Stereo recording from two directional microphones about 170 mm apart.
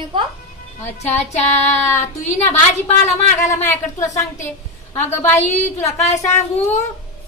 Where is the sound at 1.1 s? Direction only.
10° left (ahead or behind).